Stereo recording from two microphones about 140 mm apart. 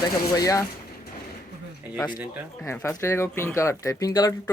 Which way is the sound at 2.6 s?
20° left (ahead or behind).